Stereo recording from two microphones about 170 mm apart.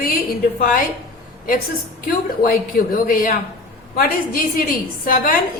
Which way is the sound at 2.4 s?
55° left (ahead or behind).